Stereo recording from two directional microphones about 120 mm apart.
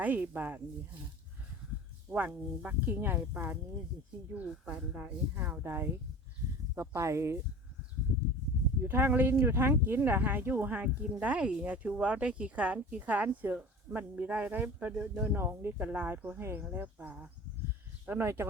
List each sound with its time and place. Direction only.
0.0 s speech: 15° right (ahead or behind)
2.0 s speech: 10° right (ahead or behind)
8.8 s speech: 20° right (ahead or behind)